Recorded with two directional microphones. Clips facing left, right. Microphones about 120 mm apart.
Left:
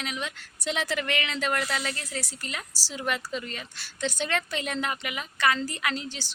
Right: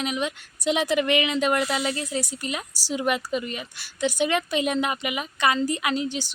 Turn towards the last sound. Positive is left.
turn(degrees=-15)  # may be behind; listen again after turning